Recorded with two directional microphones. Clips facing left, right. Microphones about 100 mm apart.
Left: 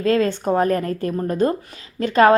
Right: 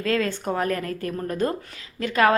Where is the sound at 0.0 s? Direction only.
30° left (ahead or behind).